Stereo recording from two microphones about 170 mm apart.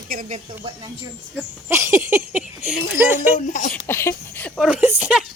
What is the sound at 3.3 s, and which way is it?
Speech, 50° left (ahead or behind).